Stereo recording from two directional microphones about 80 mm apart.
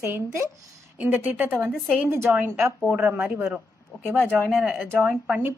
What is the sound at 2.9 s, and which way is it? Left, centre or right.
Speech, centre.